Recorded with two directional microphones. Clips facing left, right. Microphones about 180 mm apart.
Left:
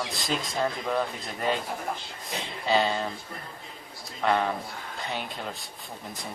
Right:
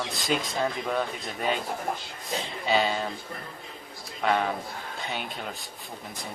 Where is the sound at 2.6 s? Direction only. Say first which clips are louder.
Left 1 dB; centre (ahead or behind).